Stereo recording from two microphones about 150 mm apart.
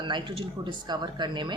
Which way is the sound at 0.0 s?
30° right (ahead or behind).